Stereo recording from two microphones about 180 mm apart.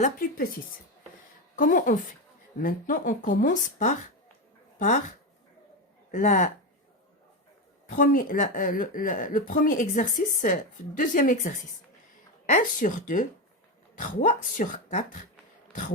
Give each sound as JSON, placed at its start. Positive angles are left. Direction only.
{"t": 0.0, "sound": "speech", "side_deg": 50}
{"t": 1.5, "sound": "speech", "side_deg": 45}
{"t": 6.1, "sound": "speech", "side_deg": 45}
{"t": 7.9, "sound": "speech", "side_deg": 50}